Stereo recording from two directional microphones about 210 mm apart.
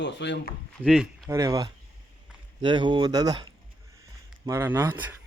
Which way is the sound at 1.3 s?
15° right (ahead or behind).